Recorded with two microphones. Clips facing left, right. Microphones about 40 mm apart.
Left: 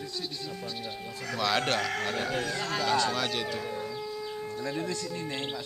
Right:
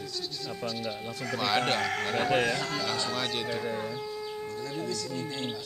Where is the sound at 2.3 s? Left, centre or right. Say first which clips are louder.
Right 5 dB; right.